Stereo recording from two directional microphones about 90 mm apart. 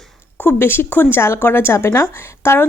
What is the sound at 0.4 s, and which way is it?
Speech, 25° left (ahead or behind).